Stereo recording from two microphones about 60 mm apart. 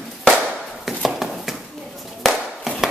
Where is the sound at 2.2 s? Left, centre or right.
Centre.